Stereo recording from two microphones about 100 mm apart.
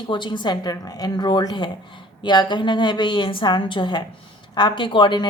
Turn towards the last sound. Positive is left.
turn(degrees=50)  # may be behind; listen again after turning